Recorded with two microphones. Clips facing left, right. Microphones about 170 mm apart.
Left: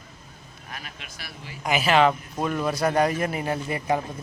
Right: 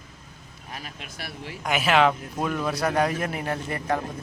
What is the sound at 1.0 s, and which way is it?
Speech, 60° right (ahead or behind).